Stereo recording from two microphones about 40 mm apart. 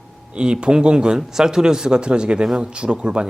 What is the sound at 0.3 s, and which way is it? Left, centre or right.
Speech, right.